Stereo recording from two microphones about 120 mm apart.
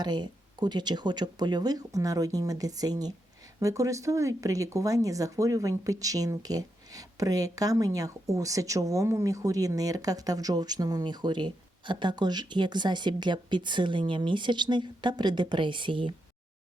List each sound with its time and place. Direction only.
0.0 s speech: 35° right (ahead or behind)